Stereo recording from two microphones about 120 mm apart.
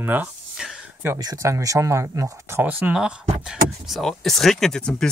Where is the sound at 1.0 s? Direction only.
30° right (ahead or behind).